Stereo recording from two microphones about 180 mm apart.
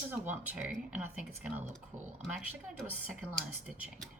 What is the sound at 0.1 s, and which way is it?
A woman's voice, 10° right (ahead or behind).